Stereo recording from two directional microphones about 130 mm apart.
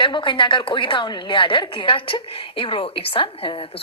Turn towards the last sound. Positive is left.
turn(degrees=45)  # may be behind; listen again after turning